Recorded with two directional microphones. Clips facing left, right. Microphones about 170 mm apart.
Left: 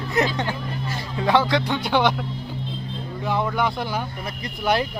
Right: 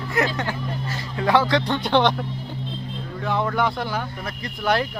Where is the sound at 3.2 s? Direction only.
10° left (ahead or behind).